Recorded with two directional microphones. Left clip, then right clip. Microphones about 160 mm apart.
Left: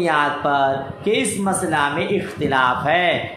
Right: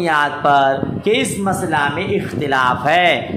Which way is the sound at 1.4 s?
15° right (ahead or behind).